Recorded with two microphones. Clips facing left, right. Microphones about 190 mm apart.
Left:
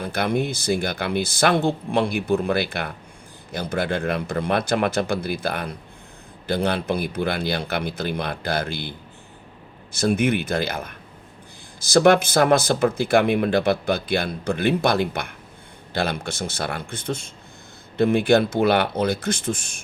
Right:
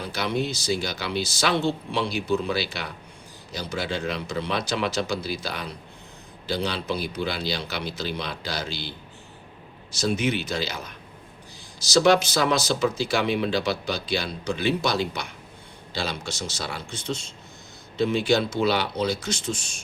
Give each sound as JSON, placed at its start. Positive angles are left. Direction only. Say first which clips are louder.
{"t": 0.0, "sound": "speech", "louder": "left 4 dB", "side_deg": 55}
{"t": 9.9, "sound": "speech", "louder": "left 4 dB", "side_deg": 55}